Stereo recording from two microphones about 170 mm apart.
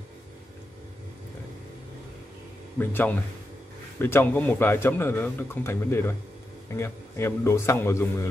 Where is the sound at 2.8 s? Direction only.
10° left (ahead or behind).